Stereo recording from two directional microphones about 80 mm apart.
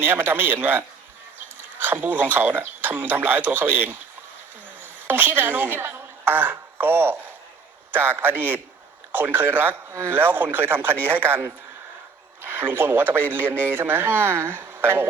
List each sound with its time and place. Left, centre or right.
0.0 s a man's voice: right